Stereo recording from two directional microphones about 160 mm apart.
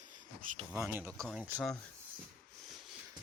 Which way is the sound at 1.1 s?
5° left (ahead or behind).